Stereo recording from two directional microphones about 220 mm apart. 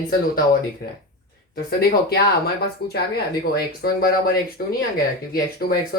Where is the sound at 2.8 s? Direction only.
45° left (ahead or behind).